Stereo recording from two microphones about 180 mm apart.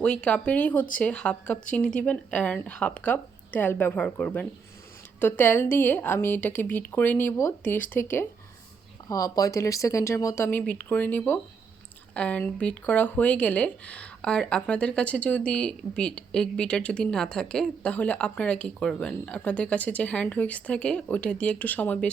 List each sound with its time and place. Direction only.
0.0 s speech: 5° left (ahead or behind)
9.0 s speech: 20° left (ahead or behind)